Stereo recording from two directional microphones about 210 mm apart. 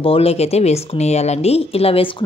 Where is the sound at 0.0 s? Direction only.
25° left (ahead or behind).